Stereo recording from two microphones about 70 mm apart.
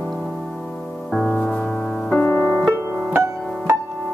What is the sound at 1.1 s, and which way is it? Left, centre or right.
Music, centre.